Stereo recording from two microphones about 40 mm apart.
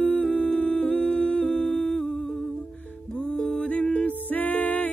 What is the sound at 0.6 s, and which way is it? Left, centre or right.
Humming, left.